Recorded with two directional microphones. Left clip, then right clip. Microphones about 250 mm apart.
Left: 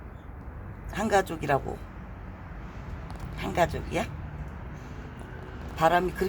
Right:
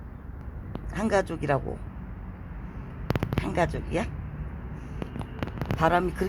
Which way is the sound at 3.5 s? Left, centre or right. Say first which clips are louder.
Left 2 dB; centre.